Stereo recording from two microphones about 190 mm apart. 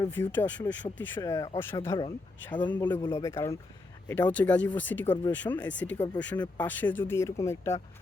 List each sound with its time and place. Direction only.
0.0 s speech: 10° left (ahead or behind)